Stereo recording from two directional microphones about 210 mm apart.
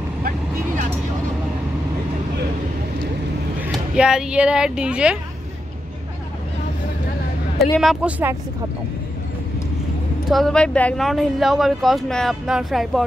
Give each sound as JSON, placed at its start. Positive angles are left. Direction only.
{"t": 3.6, "sound": "speech", "side_deg": -5}
{"t": 7.5, "sound": "speech", "side_deg": 0}
{"t": 10.3, "sound": "speech", "side_deg": 5}